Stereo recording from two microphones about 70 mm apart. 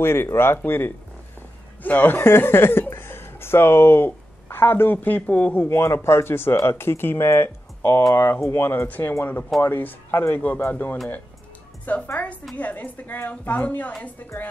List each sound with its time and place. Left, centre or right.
0.0 s a woman's voice: left